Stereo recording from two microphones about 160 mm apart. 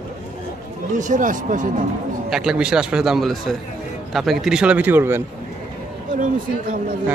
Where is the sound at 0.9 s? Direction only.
50° right (ahead or behind).